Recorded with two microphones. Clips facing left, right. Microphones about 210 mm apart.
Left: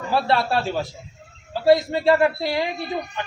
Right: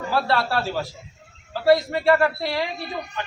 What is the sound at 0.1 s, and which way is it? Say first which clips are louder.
A man's voice: left 2 dB; 20° left (ahead or behind).